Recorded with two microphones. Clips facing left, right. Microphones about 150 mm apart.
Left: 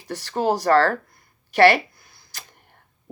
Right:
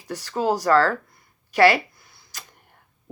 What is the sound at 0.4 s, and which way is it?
Speech, 30° left (ahead or behind).